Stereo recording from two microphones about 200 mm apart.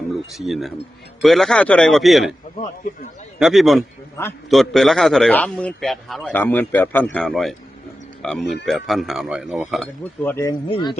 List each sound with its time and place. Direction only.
0.3 s a man's voice: centre (ahead or behind)
3.3 s a man's voice: centre (ahead or behind)
10.7 s speech: 20° left (ahead or behind)